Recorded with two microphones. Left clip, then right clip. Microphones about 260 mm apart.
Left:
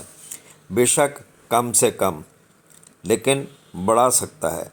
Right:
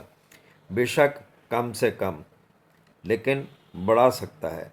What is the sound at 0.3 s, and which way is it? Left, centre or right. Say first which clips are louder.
Speech: left 7 dB; centre.